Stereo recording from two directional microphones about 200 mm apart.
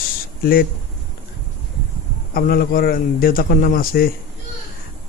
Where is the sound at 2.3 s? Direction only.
45° left (ahead or behind).